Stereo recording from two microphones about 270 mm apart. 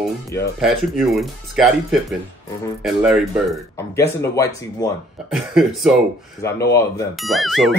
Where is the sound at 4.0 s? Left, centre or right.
Centre.